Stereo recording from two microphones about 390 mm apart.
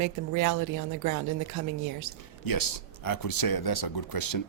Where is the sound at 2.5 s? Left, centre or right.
Left.